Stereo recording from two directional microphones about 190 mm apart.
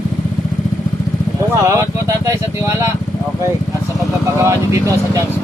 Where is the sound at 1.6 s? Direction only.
15° right (ahead or behind).